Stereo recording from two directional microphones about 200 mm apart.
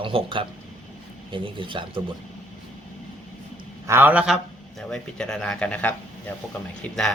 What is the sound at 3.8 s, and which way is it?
Speech, 10° right (ahead or behind).